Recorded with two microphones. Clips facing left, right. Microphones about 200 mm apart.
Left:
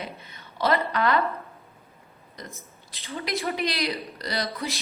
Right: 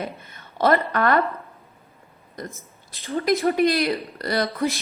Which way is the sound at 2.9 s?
50° right (ahead or behind).